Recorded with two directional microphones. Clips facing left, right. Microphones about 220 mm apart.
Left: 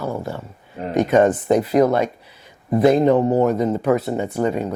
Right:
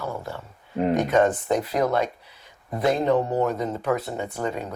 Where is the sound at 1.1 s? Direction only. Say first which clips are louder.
Left 8 dB; 15° left (ahead or behind).